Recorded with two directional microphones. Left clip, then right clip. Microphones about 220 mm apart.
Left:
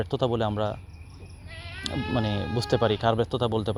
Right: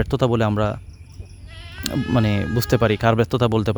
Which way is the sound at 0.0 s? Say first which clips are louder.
Right 6 dB; 50° right (ahead or behind).